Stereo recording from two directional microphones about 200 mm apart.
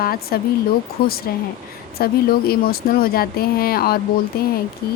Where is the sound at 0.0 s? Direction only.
50° left (ahead or behind).